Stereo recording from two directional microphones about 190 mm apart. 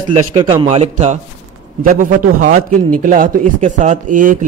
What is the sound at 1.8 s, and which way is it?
A man's voice, 50° right (ahead or behind).